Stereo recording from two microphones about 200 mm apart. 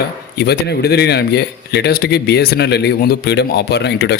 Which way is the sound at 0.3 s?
55° left (ahead or behind).